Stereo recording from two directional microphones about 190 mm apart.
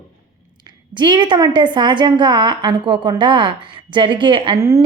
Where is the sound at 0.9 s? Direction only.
25° right (ahead or behind).